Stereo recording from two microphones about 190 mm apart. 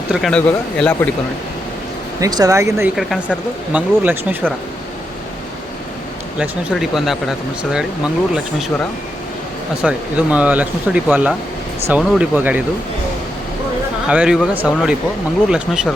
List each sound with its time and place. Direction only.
0.1 s speech: centre (ahead or behind)
2.2 s speech: 20° right (ahead or behind)
2.9 s speech: centre (ahead or behind)
6.4 s speech: 5° right (ahead or behind)
9.8 s speech: 5° right (ahead or behind)
14.1 s speech: 5° right (ahead or behind)